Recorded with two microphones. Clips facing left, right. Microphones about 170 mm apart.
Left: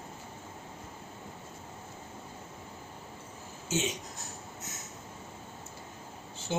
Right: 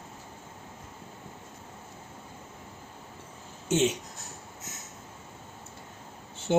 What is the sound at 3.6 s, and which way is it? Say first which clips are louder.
Speech: right 7 dB; 70° right (ahead or behind).